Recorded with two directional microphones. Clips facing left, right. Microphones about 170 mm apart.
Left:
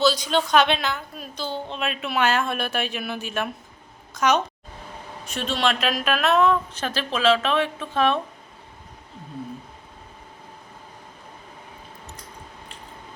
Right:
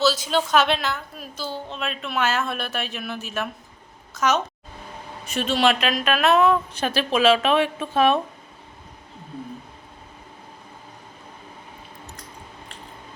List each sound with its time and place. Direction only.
0.0 s a woman's voice: 5° right (ahead or behind)